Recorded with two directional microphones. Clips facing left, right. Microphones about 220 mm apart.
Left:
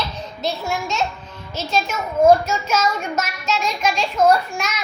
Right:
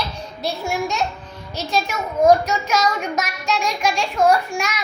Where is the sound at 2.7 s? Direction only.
15° right (ahead or behind).